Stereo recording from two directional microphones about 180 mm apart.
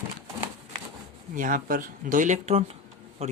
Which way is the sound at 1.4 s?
50° right (ahead or behind).